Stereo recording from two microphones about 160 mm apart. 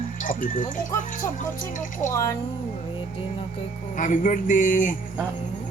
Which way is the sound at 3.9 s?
55° left (ahead or behind).